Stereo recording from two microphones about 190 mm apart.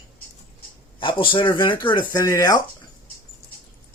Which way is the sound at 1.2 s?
25° left (ahead or behind).